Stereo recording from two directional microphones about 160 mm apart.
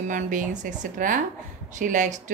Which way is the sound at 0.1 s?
50° right (ahead or behind).